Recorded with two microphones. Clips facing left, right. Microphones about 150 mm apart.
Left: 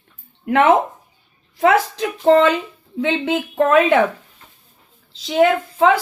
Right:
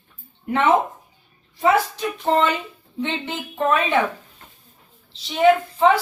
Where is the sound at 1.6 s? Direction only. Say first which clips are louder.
Left 3 dB; 90° left.